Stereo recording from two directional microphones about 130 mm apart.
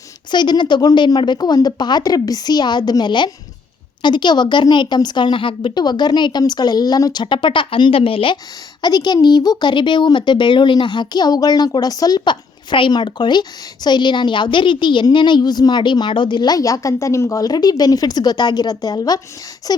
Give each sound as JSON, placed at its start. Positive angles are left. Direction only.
{"t": 0.3, "sound": "a woman's voice", "side_deg": 35}
{"t": 8.8, "sound": "a woman's voice", "side_deg": 30}
{"t": 19.6, "sound": "a sound", "side_deg": 30}